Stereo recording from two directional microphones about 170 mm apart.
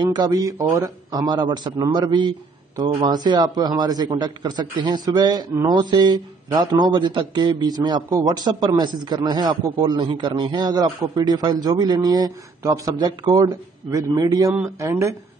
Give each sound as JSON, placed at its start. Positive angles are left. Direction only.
{"t": 0.0, "sound": "a man's voice", "side_deg": -25}